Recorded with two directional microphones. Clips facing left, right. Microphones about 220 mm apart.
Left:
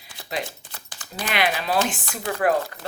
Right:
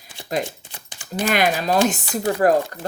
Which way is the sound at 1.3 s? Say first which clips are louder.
Right 4 dB; 45° right (ahead or behind).